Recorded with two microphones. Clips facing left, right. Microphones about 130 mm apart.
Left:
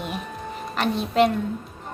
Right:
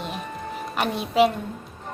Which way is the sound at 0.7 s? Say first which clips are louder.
Left 1 dB; 10° right (ahead or behind).